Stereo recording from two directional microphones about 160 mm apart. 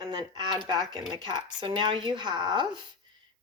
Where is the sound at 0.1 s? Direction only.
25° right (ahead or behind).